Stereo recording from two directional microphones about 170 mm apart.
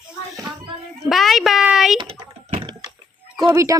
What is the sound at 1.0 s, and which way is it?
Speech, centre (ahead or behind).